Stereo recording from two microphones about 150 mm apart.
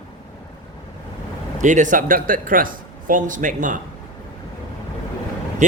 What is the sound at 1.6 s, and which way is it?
A man's voice, 55° right (ahead or behind).